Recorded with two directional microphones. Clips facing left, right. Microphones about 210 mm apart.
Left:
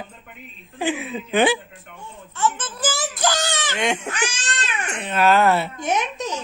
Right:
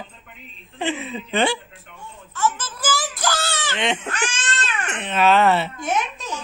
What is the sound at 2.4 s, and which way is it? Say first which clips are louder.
Baby cry: left 1 dB; 20° left (ahead or behind).